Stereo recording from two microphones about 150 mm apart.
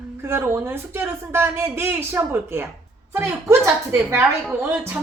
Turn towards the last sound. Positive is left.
turn(degrees=-15)  # may be behind; listen again after turning